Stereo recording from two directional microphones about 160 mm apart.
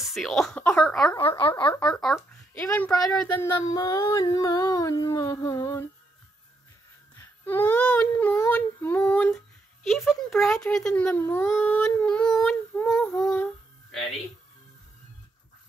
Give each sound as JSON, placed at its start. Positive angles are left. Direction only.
{"t": 0.0, "sound": "speech", "side_deg": 0}
{"t": 1.1, "sound": "speech", "side_deg": 30}
{"t": 1.9, "sound": "speech", "side_deg": 0}
{"t": 2.6, "sound": "speech", "side_deg": 10}
{"t": 3.6, "sound": "a sound", "side_deg": 25}
{"t": 7.2, "sound": "speech", "side_deg": 10}